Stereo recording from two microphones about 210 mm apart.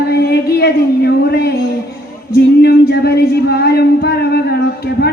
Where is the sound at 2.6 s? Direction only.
50° left (ahead or behind).